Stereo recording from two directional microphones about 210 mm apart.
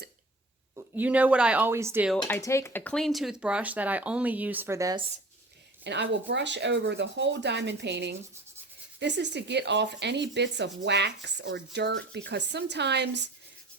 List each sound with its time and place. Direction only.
0.8 s speech: 10° right (ahead or behind)
2.2 s speech: 10° left (ahead or behind); by 5.0 s 15° right (ahead or behind)
5.8 s speech: 55° right (ahead or behind)